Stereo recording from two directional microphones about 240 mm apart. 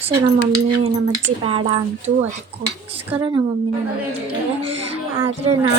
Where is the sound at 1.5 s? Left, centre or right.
Right.